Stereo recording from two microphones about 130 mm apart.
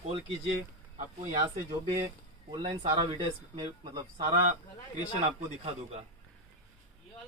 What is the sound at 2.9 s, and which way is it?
Speech, 35° right (ahead or behind).